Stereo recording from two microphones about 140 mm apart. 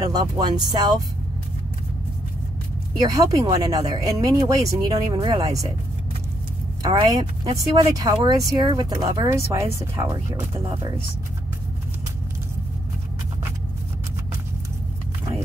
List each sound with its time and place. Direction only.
0.0 s speech: 30° right (ahead or behind)
3.0 s speech: 25° right (ahead or behind)
6.8 s speech: 30° right (ahead or behind)